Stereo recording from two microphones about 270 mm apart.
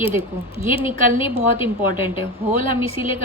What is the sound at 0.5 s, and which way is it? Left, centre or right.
Speech, left.